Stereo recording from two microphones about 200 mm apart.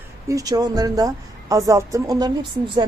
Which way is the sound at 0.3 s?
15° right (ahead or behind).